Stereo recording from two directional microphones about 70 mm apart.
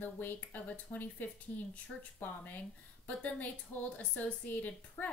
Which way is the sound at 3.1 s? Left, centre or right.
Left.